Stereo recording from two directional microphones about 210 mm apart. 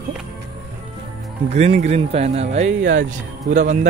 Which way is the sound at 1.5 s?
30° right (ahead or behind).